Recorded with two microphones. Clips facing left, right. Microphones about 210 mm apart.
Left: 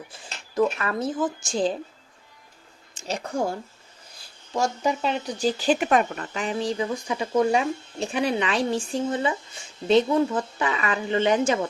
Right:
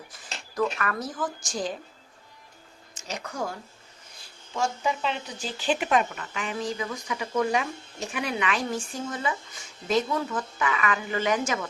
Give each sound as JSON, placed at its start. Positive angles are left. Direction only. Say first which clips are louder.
{"t": 0.8, "sound": "speech", "louder": "left 5 dB", "side_deg": 25}
{"t": 2.9, "sound": "speech", "louder": "left 7 dB", "side_deg": 30}
{"t": 4.5, "sound": "speech", "louder": "left 3 dB", "side_deg": 40}
{"t": 6.3, "sound": "speech", "louder": "left 5 dB", "side_deg": 35}